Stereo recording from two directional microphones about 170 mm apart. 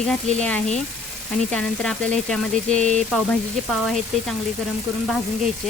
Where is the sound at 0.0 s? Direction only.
5° left (ahead or behind).